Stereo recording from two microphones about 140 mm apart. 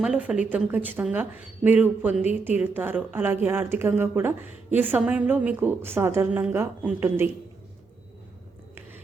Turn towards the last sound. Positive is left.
turn(degrees=-15)  # may be behind; listen again after turning